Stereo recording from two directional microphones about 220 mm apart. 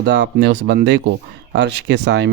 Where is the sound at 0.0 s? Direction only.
50° right (ahead or behind).